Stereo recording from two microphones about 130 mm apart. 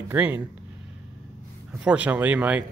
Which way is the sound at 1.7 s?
10° right (ahead or behind).